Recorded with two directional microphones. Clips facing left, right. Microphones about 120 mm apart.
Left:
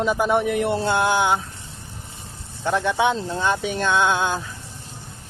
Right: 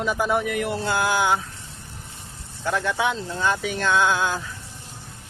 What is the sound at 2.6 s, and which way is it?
Speech, 20° left (ahead or behind).